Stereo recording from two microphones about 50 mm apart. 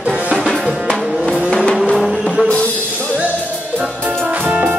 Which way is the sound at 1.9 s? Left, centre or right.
Centre.